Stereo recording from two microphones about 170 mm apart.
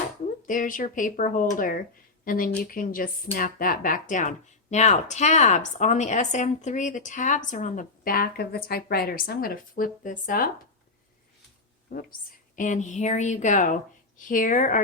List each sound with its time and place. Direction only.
0.4 s speech: 50° left (ahead or behind)
11.9 s speech: 55° left (ahead or behind)